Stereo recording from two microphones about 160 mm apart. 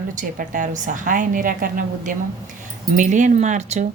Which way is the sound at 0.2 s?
55° right (ahead or behind).